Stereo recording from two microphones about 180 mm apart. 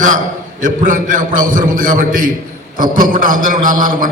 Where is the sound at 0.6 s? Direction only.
45° right (ahead or behind).